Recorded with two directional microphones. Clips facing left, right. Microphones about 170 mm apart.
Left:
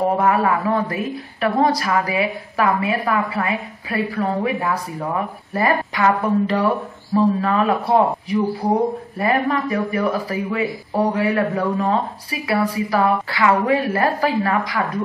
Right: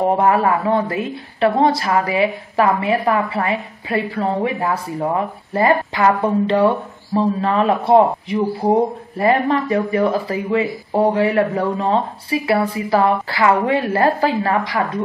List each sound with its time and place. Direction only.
0.2 s a woman's voice: 30° right (ahead or behind)